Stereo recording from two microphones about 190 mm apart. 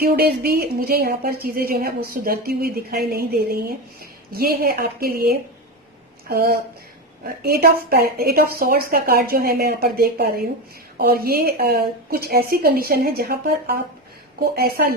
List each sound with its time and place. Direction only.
0.0 s speech: 55° right (ahead or behind)